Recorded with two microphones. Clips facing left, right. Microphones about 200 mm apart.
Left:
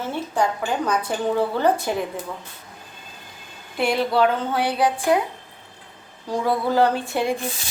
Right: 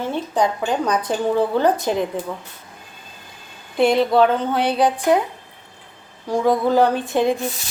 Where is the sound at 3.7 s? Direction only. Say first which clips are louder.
Right 5 dB; 20° right (ahead or behind).